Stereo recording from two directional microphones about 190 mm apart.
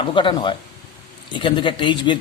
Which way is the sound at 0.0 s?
25° left (ahead or behind).